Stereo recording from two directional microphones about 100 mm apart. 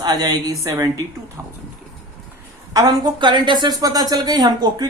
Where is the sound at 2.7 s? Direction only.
45° right (ahead or behind).